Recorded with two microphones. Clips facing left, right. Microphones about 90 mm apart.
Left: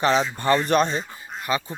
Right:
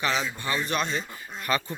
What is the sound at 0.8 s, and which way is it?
Speech, 25° left (ahead or behind).